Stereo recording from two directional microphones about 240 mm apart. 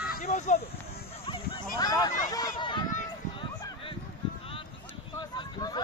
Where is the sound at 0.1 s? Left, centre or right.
Left.